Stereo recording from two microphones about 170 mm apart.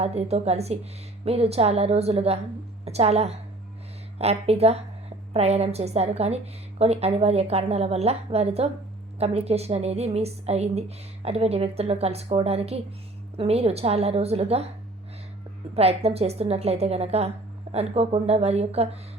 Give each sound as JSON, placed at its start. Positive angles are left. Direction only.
{"t": 0.0, "sound": "a woman's voice", "side_deg": -40}
{"t": 15.7, "sound": "a woman's voice", "side_deg": -35}